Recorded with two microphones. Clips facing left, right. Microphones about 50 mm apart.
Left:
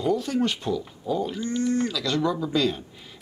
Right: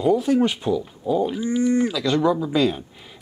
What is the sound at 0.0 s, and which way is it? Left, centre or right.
Speech, centre.